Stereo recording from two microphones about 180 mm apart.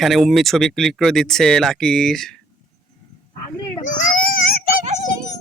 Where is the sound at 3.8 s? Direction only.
45° left (ahead or behind).